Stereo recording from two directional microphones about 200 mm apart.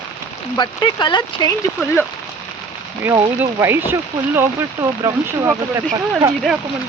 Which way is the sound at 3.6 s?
10° right (ahead or behind).